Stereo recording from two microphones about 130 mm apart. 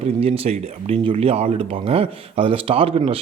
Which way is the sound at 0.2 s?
50° right (ahead or behind).